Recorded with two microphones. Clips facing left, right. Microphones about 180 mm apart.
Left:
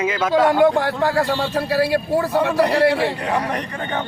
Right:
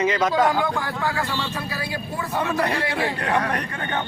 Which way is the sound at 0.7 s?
75° left (ahead or behind).